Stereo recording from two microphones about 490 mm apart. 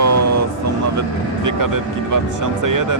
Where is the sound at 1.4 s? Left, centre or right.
Right.